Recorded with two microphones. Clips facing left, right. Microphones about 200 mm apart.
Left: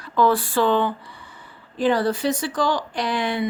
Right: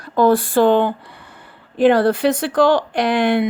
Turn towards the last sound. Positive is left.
turn(degrees=-60)  # may be behind; listen again after turning